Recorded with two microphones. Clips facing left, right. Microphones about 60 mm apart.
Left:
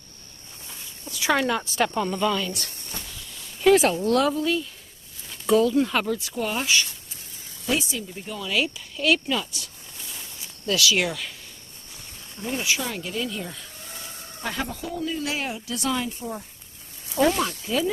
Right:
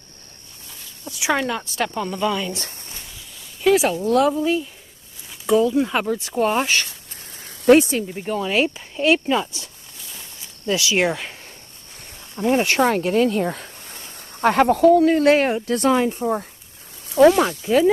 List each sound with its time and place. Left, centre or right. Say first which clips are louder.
1.4 s speech: even; centre
2.5 s speech: right 3 dB; right
3.3 s speech: right 1 dB; centre
4.4 s speech: right 4 dB; centre
5.3 s speech: right 2 dB; centre; by 8.2 s right
8.2 s speech: right 5 dB; right
10.7 s speech: right 3 dB; right
12.4 s speech: right 10 dB; right
17.4 s speech: right 8 dB; right